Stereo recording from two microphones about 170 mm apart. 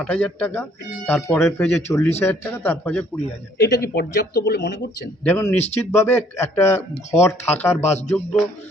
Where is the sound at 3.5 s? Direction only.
70° left (ahead or behind).